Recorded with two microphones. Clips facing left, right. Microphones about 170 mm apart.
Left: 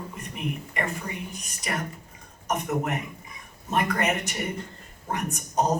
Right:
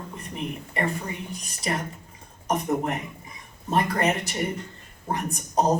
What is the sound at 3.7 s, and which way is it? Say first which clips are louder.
A man's voice: right 2 dB; 30° right (ahead or behind).